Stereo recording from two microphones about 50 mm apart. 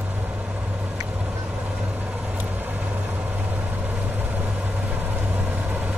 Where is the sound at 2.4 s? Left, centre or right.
Right.